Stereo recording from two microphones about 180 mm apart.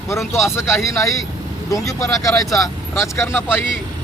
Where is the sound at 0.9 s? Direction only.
15° left (ahead or behind).